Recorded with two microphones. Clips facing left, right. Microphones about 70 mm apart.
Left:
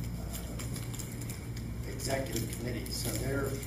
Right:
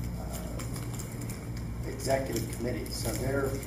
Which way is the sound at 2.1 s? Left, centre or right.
Centre.